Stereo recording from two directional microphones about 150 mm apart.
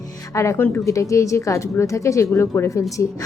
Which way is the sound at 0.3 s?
15° left (ahead or behind).